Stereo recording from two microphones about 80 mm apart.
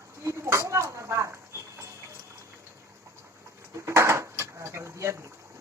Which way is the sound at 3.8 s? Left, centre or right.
Right.